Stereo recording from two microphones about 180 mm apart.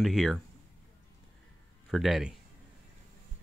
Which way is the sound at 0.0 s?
Centre (ahead or behind).